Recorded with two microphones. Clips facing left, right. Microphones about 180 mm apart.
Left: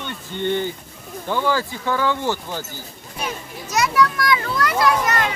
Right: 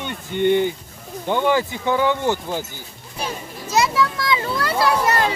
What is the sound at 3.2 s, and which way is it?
A child's voice, 25° right (ahead or behind).